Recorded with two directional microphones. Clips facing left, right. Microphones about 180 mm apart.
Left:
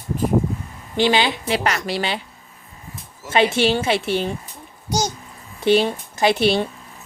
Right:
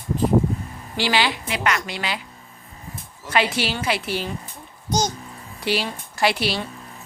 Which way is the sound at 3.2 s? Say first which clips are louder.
Left 5 dB; 25° left (ahead or behind).